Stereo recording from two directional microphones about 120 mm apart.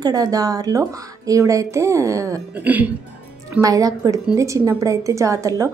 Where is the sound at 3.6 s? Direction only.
30° right (ahead or behind).